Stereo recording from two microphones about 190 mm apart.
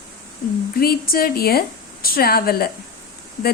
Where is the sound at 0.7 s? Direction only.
50° left (ahead or behind).